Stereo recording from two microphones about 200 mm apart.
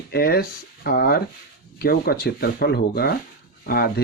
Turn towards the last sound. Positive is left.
turn(degrees=50)  # may be behind; listen again after turning